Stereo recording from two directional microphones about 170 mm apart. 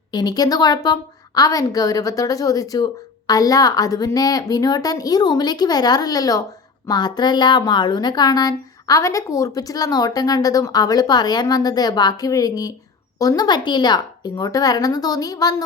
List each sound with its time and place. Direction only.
0.1 s speech: 25° left (ahead or behind)